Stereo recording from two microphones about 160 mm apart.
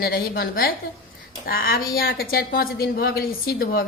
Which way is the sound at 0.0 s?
70° left (ahead or behind).